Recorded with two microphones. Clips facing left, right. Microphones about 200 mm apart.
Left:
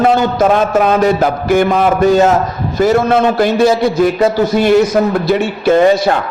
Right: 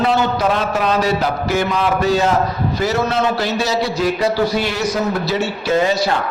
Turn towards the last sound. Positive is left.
turn(degrees=55)  # may be behind; listen again after turning